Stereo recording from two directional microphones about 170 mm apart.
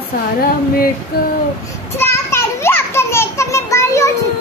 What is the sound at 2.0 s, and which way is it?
Children playing, 15° left (ahead or behind).